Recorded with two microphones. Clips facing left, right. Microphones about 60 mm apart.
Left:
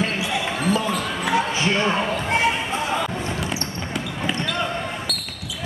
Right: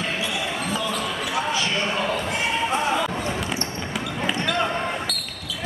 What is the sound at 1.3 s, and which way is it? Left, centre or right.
Basketball bounce, left.